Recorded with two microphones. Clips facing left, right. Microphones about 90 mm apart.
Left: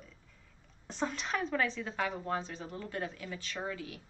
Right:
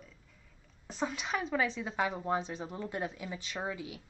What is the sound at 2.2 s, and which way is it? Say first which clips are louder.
A woman's voice: right 3 dB; 20° right (ahead or behind).